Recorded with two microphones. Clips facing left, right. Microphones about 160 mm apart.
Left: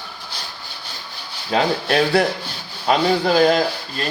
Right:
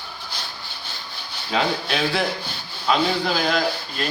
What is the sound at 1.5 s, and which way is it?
Speech, 40° left (ahead or behind).